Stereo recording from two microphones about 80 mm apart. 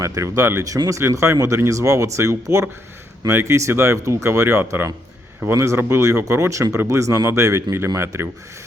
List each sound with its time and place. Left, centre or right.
0.0 s speech: right